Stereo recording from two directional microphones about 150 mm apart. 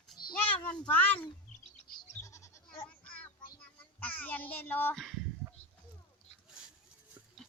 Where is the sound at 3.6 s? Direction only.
10° left (ahead or behind).